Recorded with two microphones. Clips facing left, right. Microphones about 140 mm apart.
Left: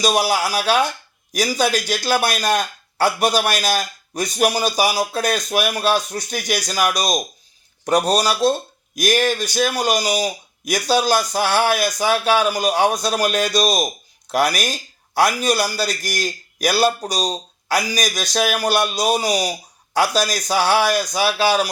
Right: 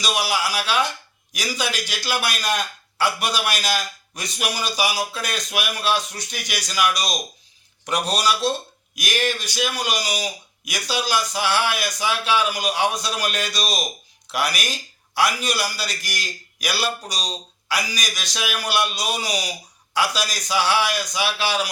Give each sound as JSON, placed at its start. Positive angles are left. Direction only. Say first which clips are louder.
{"t": 0.0, "sound": "a man's voice", "louder": "left 6 dB", "side_deg": 45}